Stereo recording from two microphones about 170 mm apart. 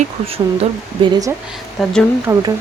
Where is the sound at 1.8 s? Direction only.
Centre (ahead or behind).